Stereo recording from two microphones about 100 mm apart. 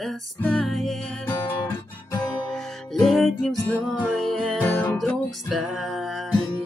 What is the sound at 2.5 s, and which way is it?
Music, 5° left (ahead or behind).